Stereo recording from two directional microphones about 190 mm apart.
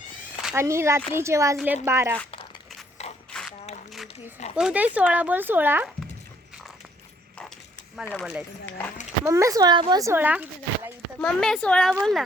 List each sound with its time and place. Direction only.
0.5 s speech: 15° right (ahead or behind)
3.0 s a sound: 35° left (ahead or behind)
4.5 s speech: 5° right (ahead or behind)
8.0 s speech: 10° left (ahead or behind)
9.2 s speech: 15° right (ahead or behind)
11.2 s speech: 5° left (ahead or behind)